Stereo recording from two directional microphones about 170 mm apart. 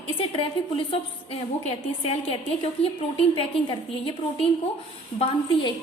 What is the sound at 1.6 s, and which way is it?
A woman's voice, 35° left (ahead or behind).